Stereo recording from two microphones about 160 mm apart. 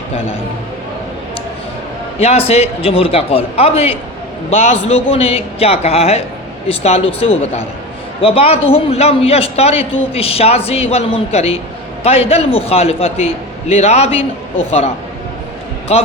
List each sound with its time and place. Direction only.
2.1 s a man's voice: 40° left (ahead or behind)